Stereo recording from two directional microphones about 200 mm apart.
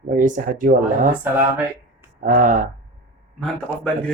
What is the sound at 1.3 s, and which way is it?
Speech, 10° right (ahead or behind).